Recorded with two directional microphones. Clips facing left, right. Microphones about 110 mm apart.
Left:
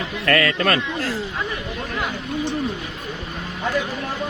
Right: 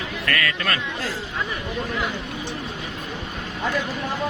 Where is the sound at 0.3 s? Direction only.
35° left (ahead or behind).